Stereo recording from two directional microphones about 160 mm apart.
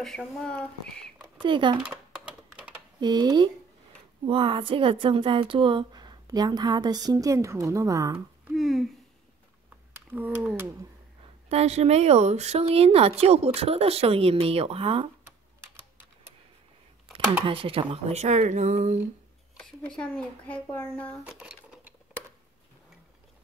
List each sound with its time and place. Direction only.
0.0 s speech: 5° left (ahead or behind)
1.4 s speech: 30° right (ahead or behind)
1.8 s typing: 5° right (ahead or behind)
3.0 s a woman's voice: 25° right (ahead or behind)
8.5 s a sound: centre (ahead or behind)
10.1 s speech: 10° right (ahead or behind)
11.4 s speech: 40° right (ahead or behind)
17.5 s speech: 35° right (ahead or behind); by 19.0 s 50° right (ahead or behind)
19.6 s speech: 5° left (ahead or behind)
21.2 s sewing machine: 10° right (ahead or behind)